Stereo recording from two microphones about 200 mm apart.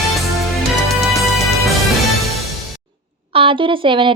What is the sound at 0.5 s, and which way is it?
Music, centre (ahead or behind).